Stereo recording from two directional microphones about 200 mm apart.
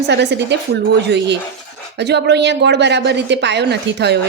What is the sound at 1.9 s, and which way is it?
A woman's voice, 60° right (ahead or behind).